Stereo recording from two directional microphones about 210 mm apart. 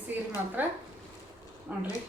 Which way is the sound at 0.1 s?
10° right (ahead or behind).